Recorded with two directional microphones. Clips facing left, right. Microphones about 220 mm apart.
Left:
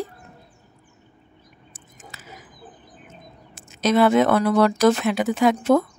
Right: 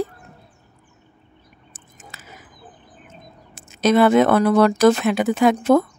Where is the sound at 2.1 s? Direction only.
55° right (ahead or behind).